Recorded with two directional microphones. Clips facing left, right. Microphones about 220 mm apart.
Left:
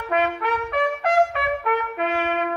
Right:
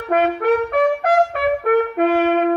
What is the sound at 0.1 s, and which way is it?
Trumpet, 50° right (ahead or behind).